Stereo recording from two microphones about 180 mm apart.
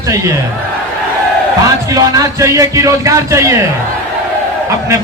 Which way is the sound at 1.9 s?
20° right (ahead or behind).